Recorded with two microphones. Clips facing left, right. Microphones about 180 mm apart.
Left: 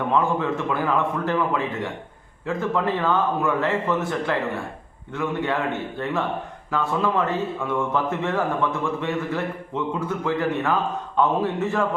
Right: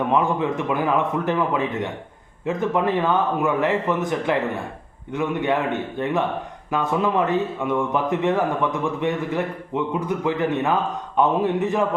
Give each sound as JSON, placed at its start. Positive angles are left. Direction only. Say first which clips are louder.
{"t": 0.1, "sound": "speech", "louder": "right 1 dB", "side_deg": -15}